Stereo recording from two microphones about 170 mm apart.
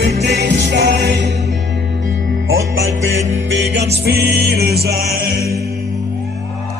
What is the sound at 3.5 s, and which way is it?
Music, 90° right.